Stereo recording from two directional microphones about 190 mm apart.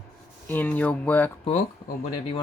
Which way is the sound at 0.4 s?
10° left (ahead or behind).